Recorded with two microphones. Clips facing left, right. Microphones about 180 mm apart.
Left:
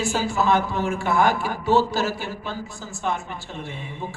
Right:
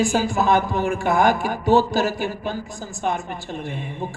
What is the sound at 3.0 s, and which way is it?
A woman's voice, 50° right (ahead or behind).